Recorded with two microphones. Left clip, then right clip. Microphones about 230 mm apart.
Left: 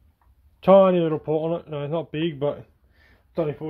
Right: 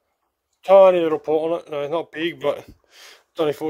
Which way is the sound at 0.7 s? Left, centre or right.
Right.